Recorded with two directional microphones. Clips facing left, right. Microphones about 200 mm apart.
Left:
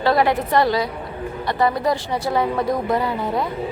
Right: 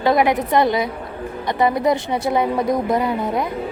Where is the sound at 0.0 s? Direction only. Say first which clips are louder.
Right 1 dB; 20° right (ahead or behind).